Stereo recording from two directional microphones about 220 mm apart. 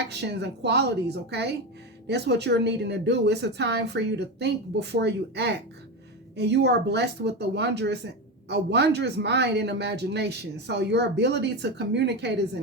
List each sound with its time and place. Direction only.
0.1 s speech: 50° right (ahead or behind)